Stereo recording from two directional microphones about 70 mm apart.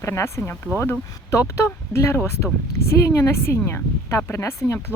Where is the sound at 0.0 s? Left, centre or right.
Left.